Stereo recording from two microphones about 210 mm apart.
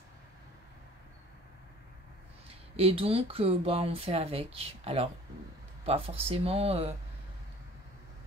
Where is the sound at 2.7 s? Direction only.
25° right (ahead or behind).